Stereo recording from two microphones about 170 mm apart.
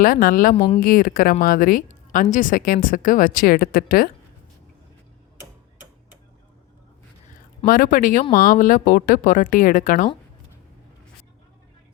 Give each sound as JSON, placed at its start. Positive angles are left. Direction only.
{"t": 0.0, "sound": "speech", "side_deg": 55}
{"t": 7.6, "sound": "a woman's voice", "side_deg": 55}